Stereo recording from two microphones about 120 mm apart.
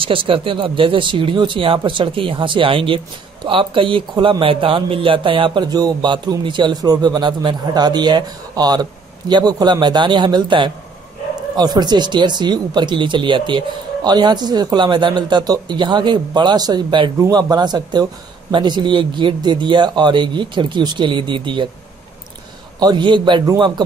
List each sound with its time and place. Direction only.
0.0 s speech: 45° right (ahead or behind)
22.8 s speech: 35° right (ahead or behind)